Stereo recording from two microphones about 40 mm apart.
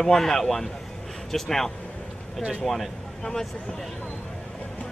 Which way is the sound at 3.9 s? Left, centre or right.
Centre.